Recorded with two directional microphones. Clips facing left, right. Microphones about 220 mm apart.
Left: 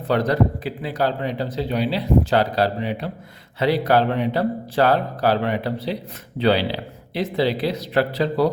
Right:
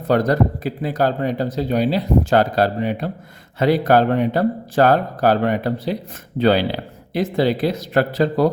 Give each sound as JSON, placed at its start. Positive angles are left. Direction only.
{"t": 0.1, "sound": "speech", "side_deg": -45}